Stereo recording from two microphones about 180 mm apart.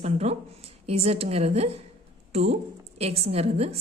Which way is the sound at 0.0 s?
35° right (ahead or behind).